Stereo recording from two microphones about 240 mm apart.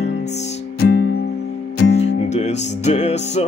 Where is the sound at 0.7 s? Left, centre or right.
Left.